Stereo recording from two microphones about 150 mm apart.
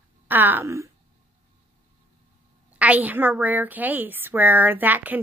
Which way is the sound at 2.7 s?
10° right (ahead or behind).